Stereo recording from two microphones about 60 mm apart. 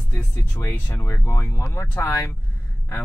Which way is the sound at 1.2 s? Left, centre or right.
Left.